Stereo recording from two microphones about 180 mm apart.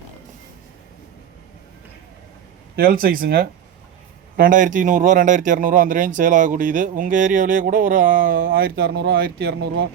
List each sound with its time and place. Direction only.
2.7 s speech: 55° right (ahead or behind)